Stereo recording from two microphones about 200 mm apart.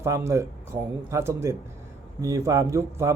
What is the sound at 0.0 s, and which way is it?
A man's voice, 15° right (ahead or behind).